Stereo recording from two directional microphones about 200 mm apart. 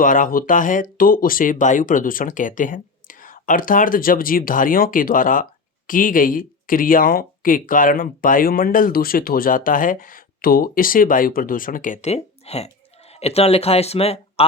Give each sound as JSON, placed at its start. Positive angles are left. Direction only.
{"t": 0.0, "sound": "speech", "side_deg": 45}